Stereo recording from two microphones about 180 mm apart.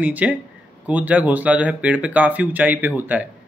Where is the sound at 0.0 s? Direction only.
10° right (ahead or behind).